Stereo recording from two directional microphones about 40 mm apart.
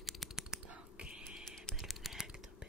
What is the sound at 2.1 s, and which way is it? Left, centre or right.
Computer keyboard, centre.